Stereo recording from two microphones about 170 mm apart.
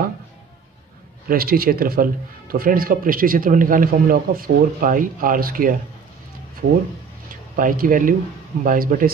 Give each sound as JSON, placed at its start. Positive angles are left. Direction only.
{"t": 1.3, "sound": "speech", "side_deg": -60}
{"t": 7.5, "sound": "speech", "side_deg": -55}